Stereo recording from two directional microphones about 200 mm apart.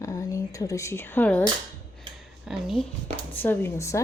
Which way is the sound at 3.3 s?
10° left (ahead or behind).